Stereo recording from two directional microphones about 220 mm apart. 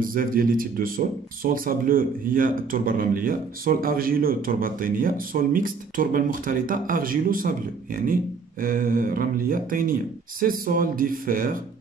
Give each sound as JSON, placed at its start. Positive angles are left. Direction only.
{"t": 0.0, "sound": "speech", "side_deg": -40}